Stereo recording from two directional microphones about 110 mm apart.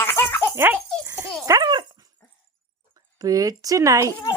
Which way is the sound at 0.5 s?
20° right (ahead or behind).